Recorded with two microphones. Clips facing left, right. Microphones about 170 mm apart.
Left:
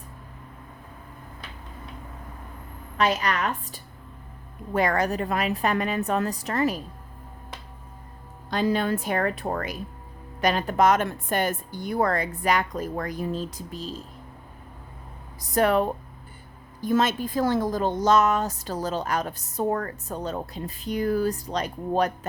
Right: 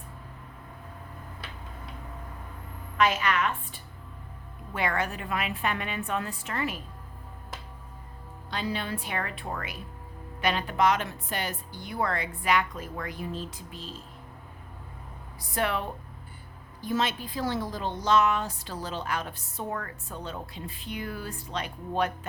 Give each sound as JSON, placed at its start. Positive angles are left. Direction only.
{"t": 3.0, "sound": "a woman's voice", "side_deg": 35}
{"t": 8.4, "sound": "a woman's voice", "side_deg": 45}
{"t": 15.4, "sound": "a woman's voice", "side_deg": 40}